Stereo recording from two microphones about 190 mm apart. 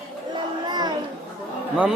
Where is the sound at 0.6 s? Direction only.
20° right (ahead or behind).